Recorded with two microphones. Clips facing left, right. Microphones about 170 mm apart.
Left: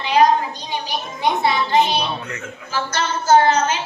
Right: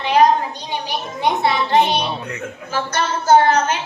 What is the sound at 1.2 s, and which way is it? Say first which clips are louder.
Speech: right 1 dB; 65° right (ahead or behind).